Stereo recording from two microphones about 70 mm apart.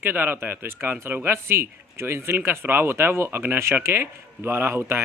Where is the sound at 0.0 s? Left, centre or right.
Right.